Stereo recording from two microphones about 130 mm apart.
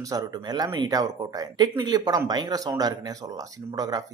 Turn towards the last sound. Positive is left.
turn(degrees=-30)  # may be behind; listen again after turning